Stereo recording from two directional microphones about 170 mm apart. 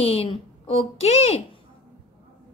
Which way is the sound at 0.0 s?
35° left (ahead or behind).